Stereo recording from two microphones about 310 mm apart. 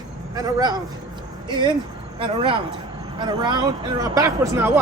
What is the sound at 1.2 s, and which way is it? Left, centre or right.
Music, centre.